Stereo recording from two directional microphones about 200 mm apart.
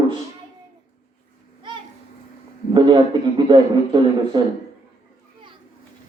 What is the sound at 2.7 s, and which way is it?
A man's voice, 25° right (ahead or behind).